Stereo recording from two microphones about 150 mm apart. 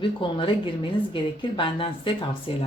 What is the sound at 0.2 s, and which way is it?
Speech, 35° left (ahead or behind).